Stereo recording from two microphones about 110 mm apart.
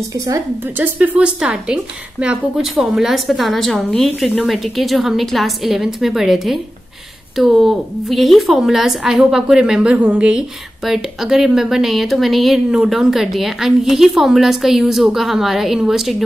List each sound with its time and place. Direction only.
0.1 s a woman's voice: 30° right (ahead or behind)
0.7 s a woman's voice: 15° right (ahead or behind)